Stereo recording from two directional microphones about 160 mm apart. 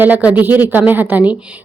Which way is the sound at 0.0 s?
10° right (ahead or behind).